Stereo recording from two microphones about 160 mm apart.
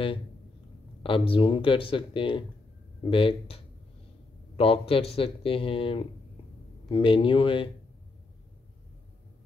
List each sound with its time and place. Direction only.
1.0 s speech: 35° left (ahead or behind)